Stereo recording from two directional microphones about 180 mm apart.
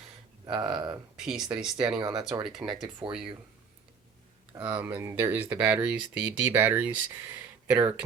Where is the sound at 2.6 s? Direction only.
5° right (ahead or behind).